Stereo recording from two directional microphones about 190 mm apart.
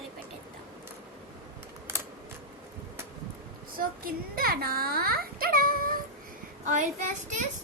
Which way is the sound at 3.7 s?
50° right (ahead or behind).